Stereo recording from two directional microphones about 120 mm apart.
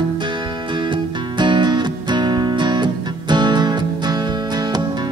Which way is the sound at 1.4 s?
40° right (ahead or behind).